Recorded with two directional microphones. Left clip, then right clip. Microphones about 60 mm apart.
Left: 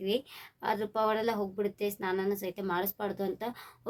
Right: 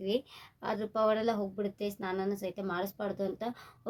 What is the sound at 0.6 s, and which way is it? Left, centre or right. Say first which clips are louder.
A woman's voice: left 1 dB; left.